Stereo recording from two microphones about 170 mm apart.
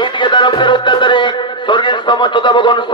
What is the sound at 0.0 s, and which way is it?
Music, 30° left (ahead or behind).